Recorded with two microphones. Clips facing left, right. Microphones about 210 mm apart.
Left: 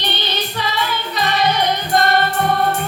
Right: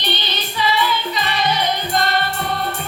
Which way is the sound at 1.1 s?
60° left (ahead or behind).